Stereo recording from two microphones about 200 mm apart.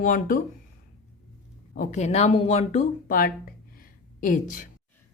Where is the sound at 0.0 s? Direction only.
45° left (ahead or behind).